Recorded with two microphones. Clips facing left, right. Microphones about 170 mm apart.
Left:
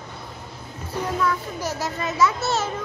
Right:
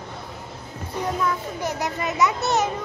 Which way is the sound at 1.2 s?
20° right (ahead or behind).